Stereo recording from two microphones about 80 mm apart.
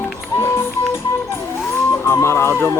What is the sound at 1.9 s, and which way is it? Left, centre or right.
Speech, left.